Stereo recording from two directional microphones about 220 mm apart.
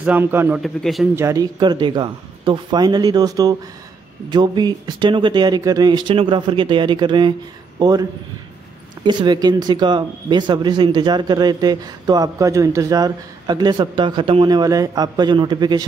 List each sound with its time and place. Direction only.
0.0 s a man's voice: 10° right (ahead or behind)
1.1 s speech: 15° right (ahead or behind)